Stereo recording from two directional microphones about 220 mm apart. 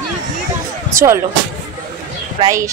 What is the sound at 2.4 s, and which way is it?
Speech, 15° right (ahead or behind).